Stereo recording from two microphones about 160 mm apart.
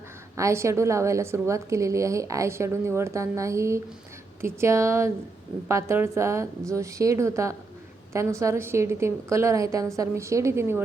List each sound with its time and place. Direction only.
0.3 s a woman's voice: 20° right (ahead or behind)